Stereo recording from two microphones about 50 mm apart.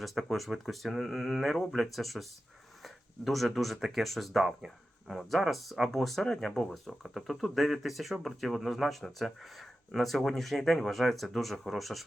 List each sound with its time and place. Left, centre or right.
0.0 s speech: centre